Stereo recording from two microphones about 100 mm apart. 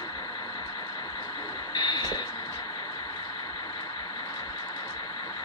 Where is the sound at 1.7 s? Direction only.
45° left (ahead or behind).